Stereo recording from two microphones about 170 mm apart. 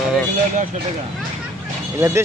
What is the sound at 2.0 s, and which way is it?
Speech, 15° right (ahead or behind).